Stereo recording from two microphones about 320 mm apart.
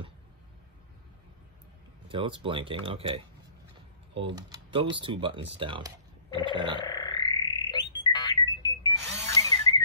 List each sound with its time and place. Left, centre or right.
2.0 s speech: centre
4.4 s speech: centre
6.9 s music: centre